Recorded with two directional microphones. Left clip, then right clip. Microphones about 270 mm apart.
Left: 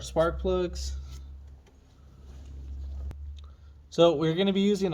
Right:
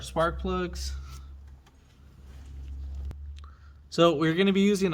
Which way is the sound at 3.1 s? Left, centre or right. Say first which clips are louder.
Right 1 dB; centre.